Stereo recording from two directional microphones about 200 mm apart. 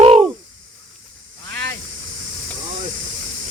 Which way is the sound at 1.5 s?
55° right (ahead or behind).